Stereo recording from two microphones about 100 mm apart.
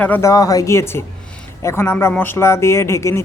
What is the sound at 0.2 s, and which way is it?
A man's voice, 35° left (ahead or behind).